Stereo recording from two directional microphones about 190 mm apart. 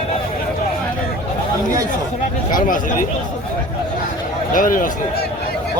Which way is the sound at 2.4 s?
45° left (ahead or behind).